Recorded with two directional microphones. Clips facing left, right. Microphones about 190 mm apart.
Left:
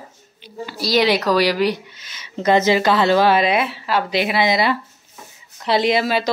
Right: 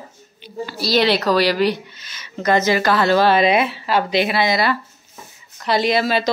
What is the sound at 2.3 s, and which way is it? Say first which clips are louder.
Speech: left 2 dB; 25° left (ahead or behind).